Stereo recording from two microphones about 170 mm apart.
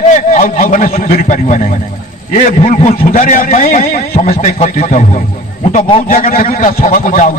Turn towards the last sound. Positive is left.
turn(degrees=50)  # may be behind; listen again after turning